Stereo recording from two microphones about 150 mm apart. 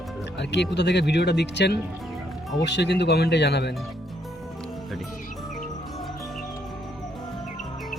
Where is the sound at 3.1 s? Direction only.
90° left.